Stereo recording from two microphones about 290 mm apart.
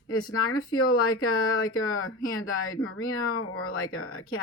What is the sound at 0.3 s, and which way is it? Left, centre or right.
Speech, left.